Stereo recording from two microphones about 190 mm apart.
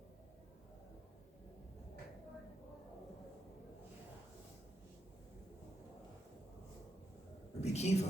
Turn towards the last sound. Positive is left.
turn(degrees=35)  # may be behind; listen again after turning